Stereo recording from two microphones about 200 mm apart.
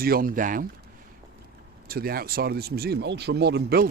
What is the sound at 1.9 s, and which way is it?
Speech, 50° right (ahead or behind).